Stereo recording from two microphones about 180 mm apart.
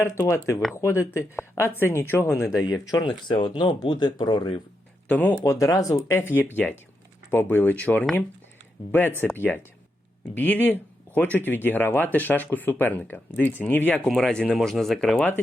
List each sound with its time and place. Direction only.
0.0 s speech: 15° left (ahead or behind)
5.0 s speech: 10° left (ahead or behind)